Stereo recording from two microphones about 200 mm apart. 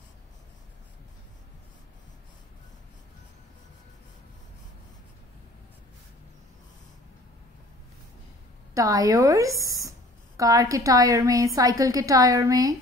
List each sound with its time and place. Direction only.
8.7 s a woman's voice: 15° right (ahead or behind)